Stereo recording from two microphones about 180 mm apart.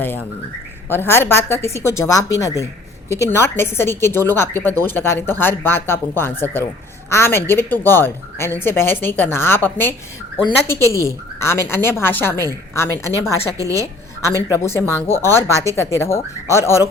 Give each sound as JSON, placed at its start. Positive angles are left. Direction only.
{"t": 0.9, "sound": "a woman's voice", "side_deg": 15}
{"t": 13.5, "sound": "a woman's voice", "side_deg": -20}
{"t": 14.6, "sound": "a woman's voice", "side_deg": 15}